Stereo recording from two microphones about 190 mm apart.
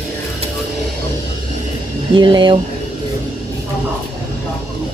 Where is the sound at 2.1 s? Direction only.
25° right (ahead or behind).